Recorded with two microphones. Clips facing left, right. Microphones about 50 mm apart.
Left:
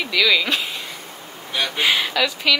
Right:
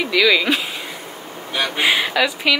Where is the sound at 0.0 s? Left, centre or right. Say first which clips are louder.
Right 3 dB; centre.